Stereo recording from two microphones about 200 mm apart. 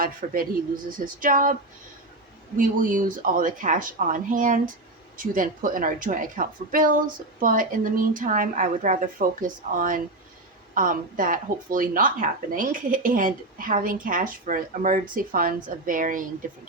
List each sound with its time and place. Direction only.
0.2 s a woman's voice: 40° right (ahead or behind)
2.6 s a woman's voice: 40° right (ahead or behind)